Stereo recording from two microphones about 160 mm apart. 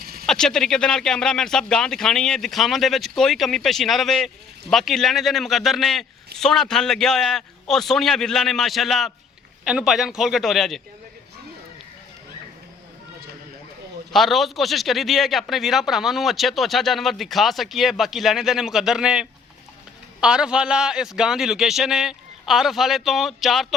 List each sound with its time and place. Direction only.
0.0 s a sound: 70° right (ahead or behind)
0.3 s speech: 5° left (ahead or behind)
14.1 s speech: centre (ahead or behind)